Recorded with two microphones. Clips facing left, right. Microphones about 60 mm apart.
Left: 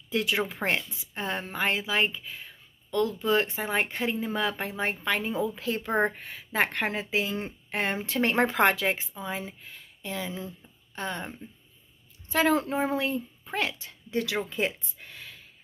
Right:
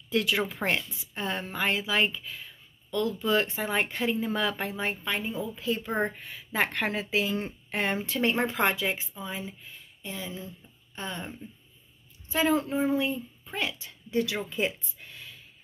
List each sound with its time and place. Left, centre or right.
0.1 s speech: left
1.1 s a woman's voice: left
5.0 s a woman's voice: left
5.9 s speech: left
8.1 s speech: left
10.0 s speech: left
11.0 s speech: left
12.3 s a woman's voice: left
15.0 s a sound: left